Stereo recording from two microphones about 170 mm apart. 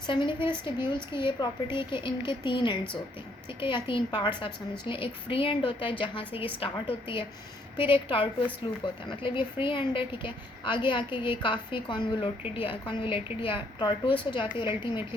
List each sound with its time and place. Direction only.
0.1 s a woman's voice: 30° left (ahead or behind)
3.8 s a woman's voice: 30° left (ahead or behind)